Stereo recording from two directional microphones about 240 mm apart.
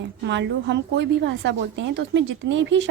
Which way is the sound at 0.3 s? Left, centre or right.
Right.